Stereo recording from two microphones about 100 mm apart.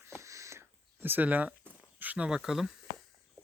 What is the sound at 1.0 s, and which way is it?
Speech, 20° right (ahead or behind).